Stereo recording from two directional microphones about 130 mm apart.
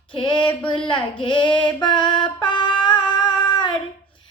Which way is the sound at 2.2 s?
35° left (ahead or behind).